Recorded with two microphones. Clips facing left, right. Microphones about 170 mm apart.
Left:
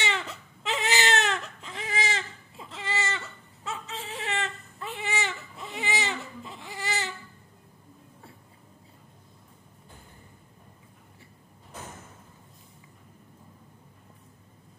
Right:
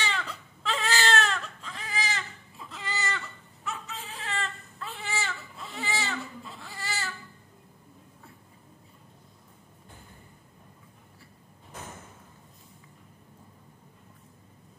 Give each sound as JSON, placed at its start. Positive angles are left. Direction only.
{"t": 0.0, "sound": "baby cry", "side_deg": 25}